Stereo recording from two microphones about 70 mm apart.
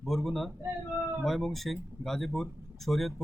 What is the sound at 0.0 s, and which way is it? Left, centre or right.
Speech, centre.